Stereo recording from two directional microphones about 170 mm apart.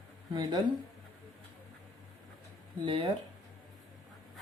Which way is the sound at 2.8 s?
35° right (ahead or behind).